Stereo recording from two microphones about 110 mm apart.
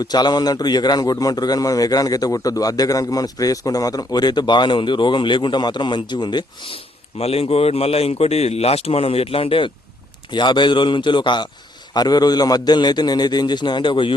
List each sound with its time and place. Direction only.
0.0 s a man's voice: 40° left (ahead or behind)
7.2 s speech: 65° left (ahead or behind)
10.3 s a man's voice: 45° left (ahead or behind)